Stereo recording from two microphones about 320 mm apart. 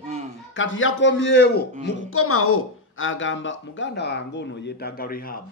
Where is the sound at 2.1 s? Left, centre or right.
Left.